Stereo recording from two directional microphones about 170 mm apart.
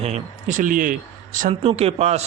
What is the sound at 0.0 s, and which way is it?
Speech, 45° right (ahead or behind).